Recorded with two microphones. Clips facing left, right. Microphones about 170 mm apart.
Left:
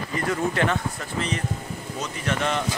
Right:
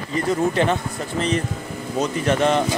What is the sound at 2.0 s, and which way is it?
Speech, 35° right (ahead or behind).